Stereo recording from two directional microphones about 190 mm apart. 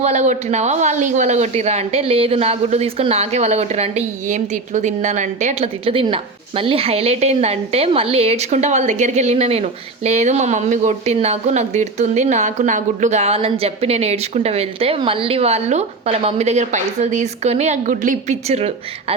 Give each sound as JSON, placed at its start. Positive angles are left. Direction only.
{"t": 0.0, "sound": "a woman's voice", "side_deg": -35}